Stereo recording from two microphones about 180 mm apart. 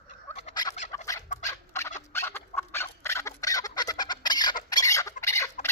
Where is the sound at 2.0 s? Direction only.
15° left (ahead or behind).